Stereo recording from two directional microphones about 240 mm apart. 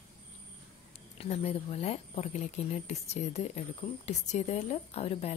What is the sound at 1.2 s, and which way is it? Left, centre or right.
A woman's voice, left.